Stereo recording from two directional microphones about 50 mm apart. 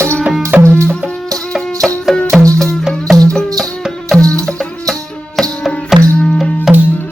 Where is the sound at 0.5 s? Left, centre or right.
Right.